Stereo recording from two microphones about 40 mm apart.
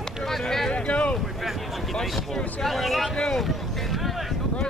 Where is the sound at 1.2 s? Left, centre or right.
Centre.